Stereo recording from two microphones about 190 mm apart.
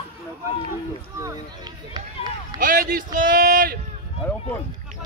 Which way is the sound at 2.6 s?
45° right (ahead or behind).